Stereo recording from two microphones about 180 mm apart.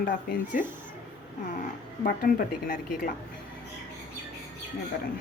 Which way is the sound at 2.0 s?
55° left (ahead or behind).